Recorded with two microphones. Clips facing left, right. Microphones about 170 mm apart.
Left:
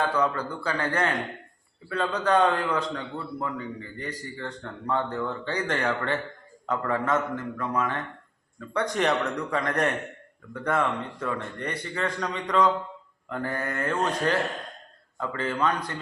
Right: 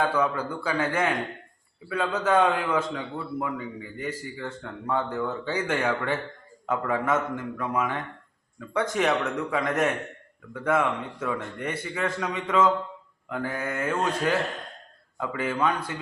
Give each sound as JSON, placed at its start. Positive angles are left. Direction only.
{"t": 0.0, "sound": "a man's voice", "side_deg": -10}